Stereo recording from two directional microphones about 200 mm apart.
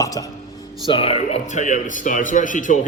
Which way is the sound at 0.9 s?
30° left (ahead or behind).